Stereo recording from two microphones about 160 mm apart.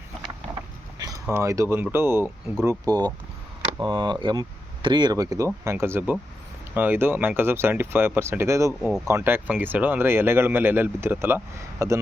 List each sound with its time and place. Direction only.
0.9 s speech: 20° right (ahead or behind)